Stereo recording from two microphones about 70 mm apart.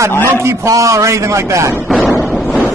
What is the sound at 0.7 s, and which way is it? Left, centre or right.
A man's voice, right.